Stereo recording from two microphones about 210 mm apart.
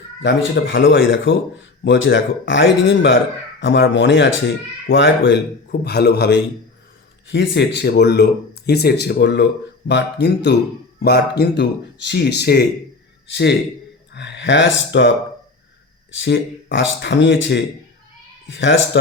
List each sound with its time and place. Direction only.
0.2 s speech: 60° left (ahead or behind)
16.2 s speech: 60° left (ahead or behind)